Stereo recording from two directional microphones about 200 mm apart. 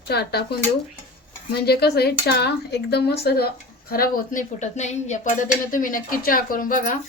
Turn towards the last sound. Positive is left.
turn(degrees=45)  # may be behind; listen again after turning